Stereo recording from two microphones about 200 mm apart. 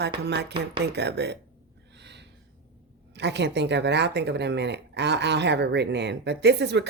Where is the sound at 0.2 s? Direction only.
55° right (ahead or behind).